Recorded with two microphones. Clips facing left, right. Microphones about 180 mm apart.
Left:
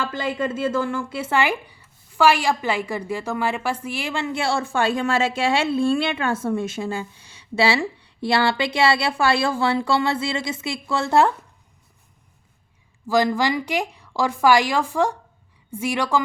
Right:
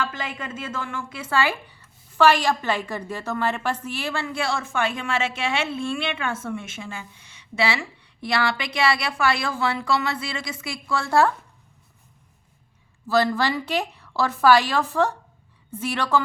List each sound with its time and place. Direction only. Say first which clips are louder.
0.0 s speech: left 5 dB; 30° left (ahead or behind)
13.1 s a woman's voice: left 2 dB; 15° left (ahead or behind)